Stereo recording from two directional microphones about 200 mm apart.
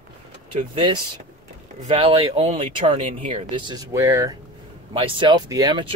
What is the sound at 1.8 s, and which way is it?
Speech, 30° right (ahead or behind).